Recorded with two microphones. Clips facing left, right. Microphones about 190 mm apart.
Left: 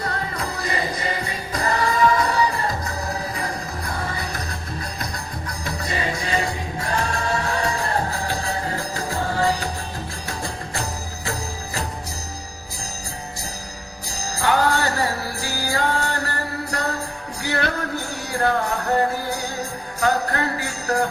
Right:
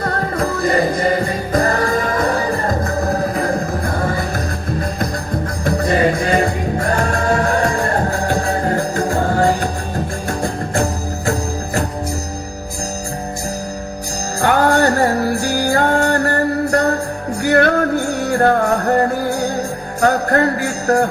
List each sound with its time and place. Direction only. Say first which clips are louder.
0.0 s music: right 8 dB; 50° right (ahead or behind)
5.6 s music: right 12 dB; 55° right (ahead or behind)
14.4 s music: right 6 dB; 50° right (ahead or behind)